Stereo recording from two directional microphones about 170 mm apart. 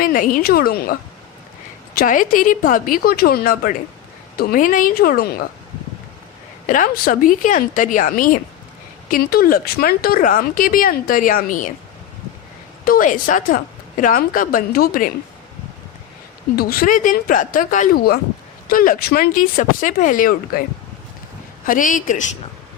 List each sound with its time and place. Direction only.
0.0 s speech: 55° left (ahead or behind)
2.0 s speech: 55° left (ahead or behind)
6.7 s a woman's voice: 55° left (ahead or behind)
12.8 s a woman's voice: 55° left (ahead or behind)
16.6 s a woman's voice: 55° left (ahead or behind)
21.7 s a woman's voice: 50° left (ahead or behind)